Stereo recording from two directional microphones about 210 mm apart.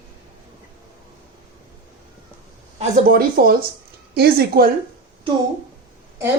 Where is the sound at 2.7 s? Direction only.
40° right (ahead or behind).